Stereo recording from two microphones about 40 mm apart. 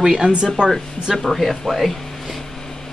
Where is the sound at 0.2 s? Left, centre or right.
Right.